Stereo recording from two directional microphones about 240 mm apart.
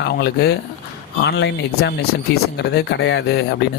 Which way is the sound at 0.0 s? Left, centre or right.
Left.